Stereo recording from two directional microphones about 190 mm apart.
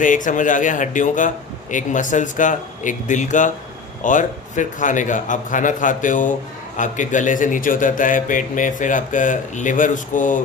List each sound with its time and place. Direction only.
0.0 s a man's voice: 45° left (ahead or behind)